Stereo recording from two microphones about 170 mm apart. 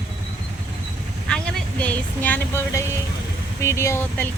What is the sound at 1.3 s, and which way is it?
Speech, 5° left (ahead or behind).